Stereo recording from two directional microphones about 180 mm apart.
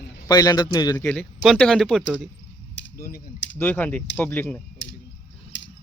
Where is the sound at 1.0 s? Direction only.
5° left (ahead or behind).